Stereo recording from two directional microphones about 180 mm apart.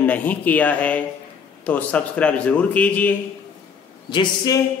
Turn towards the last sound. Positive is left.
turn(degrees=25)  # may be behind; listen again after turning